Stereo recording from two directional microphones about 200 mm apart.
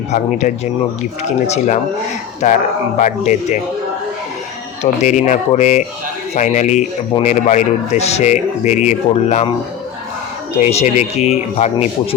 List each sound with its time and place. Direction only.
0.1 s speech: 40° left (ahead or behind)
4.8 s speech: 35° left (ahead or behind)
10.6 s speech: 35° left (ahead or behind)